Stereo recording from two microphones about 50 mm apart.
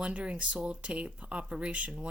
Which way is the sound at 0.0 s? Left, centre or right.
Right.